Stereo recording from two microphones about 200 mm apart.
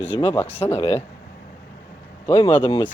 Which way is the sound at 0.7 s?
30° left (ahead or behind).